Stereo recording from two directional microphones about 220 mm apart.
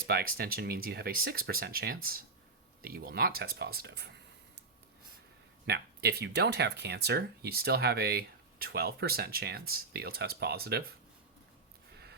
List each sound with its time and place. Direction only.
0.1 s speech: 45° right (ahead or behind)
5.6 s speech: 45° right (ahead or behind)